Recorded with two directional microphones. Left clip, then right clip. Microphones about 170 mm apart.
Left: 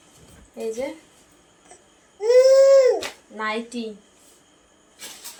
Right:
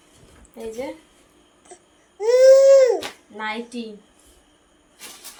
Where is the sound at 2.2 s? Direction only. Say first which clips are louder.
Right 2 dB; 60° right (ahead or behind).